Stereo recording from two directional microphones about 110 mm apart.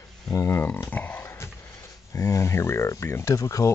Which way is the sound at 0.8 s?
15° left (ahead or behind).